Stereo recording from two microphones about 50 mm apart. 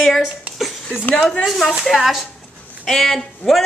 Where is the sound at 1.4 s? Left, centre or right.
Centre.